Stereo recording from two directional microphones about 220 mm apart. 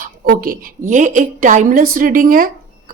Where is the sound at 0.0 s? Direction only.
40° right (ahead or behind).